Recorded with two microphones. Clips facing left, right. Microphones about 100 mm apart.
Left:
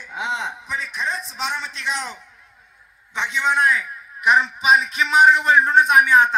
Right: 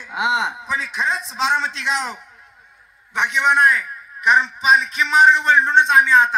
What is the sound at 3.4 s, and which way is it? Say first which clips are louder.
A man's voice: right 2 dB; centre (ahead or behind).